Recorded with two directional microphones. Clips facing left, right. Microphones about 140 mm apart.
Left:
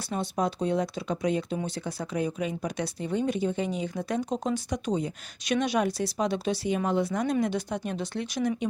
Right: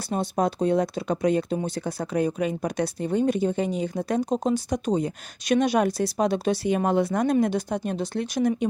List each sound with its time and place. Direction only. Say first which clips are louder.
0.0 s speech: right 4 dB; 40° right (ahead or behind)
7.4 s speech: right 4 dB; 45° right (ahead or behind)